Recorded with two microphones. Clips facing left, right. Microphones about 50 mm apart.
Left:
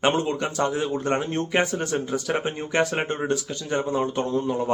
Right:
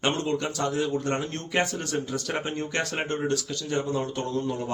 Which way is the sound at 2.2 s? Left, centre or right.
Centre.